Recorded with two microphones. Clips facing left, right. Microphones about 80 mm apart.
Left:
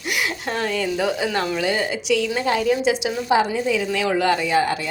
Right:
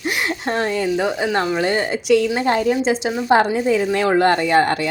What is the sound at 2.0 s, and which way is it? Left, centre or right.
Speech, right.